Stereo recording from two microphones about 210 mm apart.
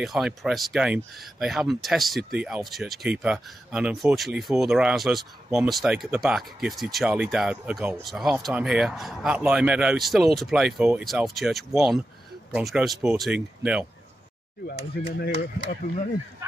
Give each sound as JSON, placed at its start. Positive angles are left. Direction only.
{"t": 0.0, "sound": "speech", "side_deg": 0}
{"t": 15.1, "sound": "speech", "side_deg": 50}